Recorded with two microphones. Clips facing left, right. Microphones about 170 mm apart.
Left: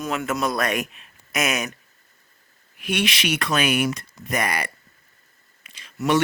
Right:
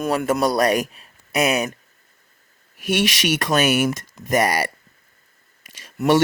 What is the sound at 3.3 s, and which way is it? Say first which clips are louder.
Speech: right 4 dB; 40° right (ahead or behind).